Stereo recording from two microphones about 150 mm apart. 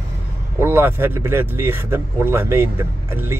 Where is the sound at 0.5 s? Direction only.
15° right (ahead or behind).